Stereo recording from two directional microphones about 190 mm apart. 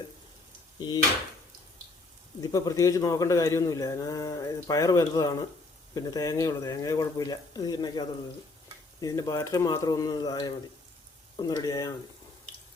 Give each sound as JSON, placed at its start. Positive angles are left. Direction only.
{"t": 0.8, "sound": "speech", "side_deg": 20}
{"t": 2.4, "sound": "a man's voice", "side_deg": 20}